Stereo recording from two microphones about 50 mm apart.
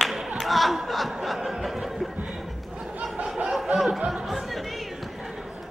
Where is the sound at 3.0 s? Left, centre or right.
Centre.